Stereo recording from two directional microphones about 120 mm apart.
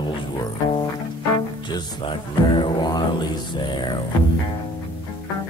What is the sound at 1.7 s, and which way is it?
Music, 45° left (ahead or behind).